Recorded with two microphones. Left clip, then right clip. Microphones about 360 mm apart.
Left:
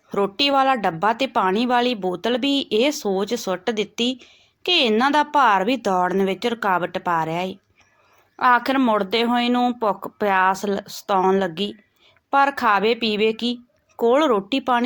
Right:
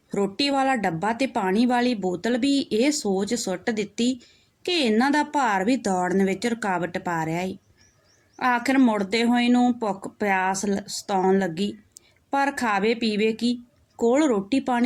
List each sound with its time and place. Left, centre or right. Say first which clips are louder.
0.1 s speech: left 5 dB; right
2.9 s speech: left 2 dB; right
3.2 s speech: left 3 dB; right
8.5 s speech: left 3 dB; right